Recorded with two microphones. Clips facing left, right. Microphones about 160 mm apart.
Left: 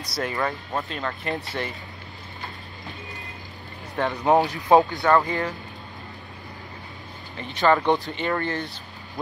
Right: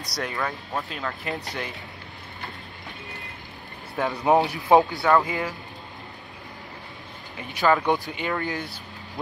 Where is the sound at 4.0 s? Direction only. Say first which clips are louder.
Left 1 dB; 10° right (ahead or behind).